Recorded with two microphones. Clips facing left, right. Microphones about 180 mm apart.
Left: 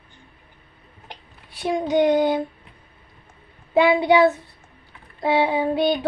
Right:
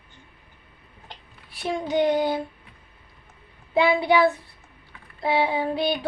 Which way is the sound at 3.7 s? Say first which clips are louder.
Left 3 dB; 20° left (ahead or behind).